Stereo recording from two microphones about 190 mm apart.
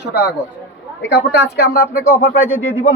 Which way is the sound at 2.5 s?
90° left.